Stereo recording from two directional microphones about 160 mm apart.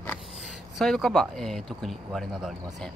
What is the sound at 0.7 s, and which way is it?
Speech, centre (ahead or behind).